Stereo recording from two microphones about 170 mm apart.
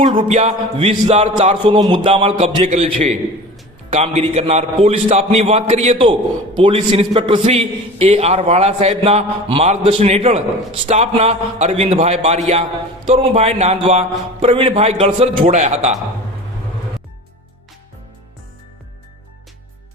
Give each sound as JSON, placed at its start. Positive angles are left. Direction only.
{"t": 0.0, "sound": "a man's voice", "side_deg": -30}